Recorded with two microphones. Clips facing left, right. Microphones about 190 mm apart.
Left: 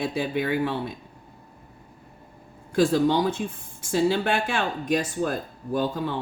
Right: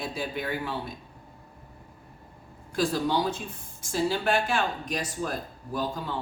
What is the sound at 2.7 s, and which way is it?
Speech, 55° left (ahead or behind).